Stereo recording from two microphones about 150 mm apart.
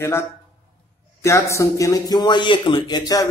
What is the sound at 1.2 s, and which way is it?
Speech, 20° left (ahead or behind).